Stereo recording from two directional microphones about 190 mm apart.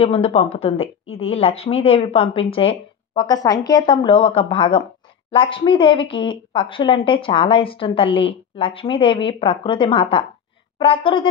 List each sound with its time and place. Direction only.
0.0 s a woman's voice: 30° left (ahead or behind)